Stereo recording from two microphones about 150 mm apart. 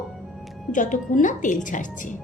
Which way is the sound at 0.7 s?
60° left (ahead or behind).